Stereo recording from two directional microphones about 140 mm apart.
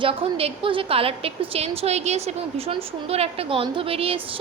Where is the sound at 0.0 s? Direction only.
40° right (ahead or behind).